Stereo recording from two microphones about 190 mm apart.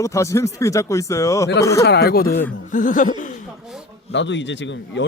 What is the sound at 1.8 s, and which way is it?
Speech, 60° left (ahead or behind).